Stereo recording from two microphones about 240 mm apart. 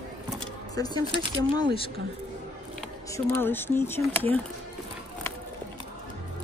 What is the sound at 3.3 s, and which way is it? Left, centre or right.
Speech, centre.